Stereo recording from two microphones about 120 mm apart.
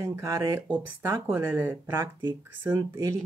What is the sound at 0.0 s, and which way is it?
Speech, 25° right (ahead or behind).